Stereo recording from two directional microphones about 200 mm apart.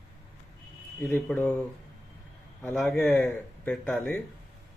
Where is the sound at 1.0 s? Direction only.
10° left (ahead or behind).